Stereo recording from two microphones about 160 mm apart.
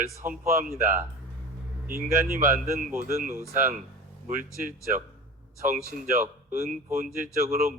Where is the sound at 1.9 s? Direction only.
65° right (ahead or behind).